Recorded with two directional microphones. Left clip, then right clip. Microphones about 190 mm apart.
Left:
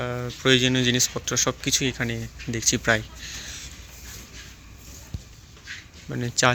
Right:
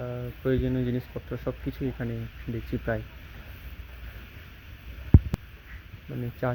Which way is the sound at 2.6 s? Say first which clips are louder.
Left 10 dB; 20° left (ahead or behind).